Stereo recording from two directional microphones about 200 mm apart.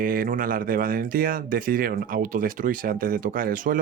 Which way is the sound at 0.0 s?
45° right (ahead or behind).